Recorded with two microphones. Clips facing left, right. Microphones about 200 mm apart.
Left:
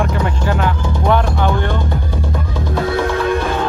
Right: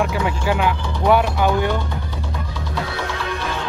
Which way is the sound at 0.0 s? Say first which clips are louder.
Left 2 dB; 5° right (ahead or behind).